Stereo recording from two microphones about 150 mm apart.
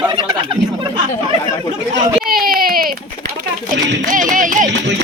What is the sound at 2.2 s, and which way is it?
Baby cry, 80° right.